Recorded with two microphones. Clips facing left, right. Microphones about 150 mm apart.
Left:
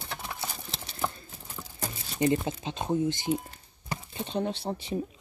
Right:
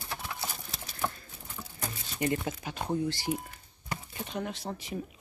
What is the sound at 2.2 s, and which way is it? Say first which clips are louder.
Speech: left 5 dB; 25° left (ahead or behind).